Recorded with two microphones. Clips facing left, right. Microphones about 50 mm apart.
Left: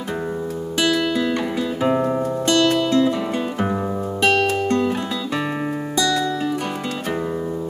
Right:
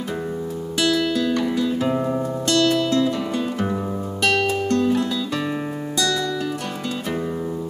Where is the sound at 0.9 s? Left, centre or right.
Centre.